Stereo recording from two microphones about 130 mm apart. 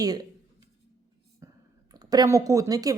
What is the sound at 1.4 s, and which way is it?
Clicking, 20° right (ahead or behind).